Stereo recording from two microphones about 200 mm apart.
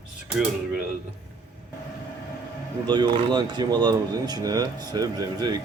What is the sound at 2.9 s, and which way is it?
Speech, 20° right (ahead or behind).